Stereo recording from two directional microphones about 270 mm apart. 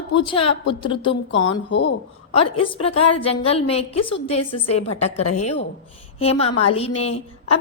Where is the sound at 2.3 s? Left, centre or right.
Centre.